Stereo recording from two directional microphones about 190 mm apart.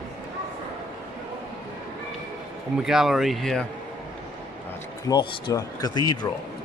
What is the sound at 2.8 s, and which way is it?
Speech, centre (ahead or behind).